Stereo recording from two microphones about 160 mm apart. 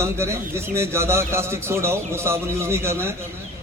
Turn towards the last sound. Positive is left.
turn(degrees=-15)  # may be behind; listen again after turning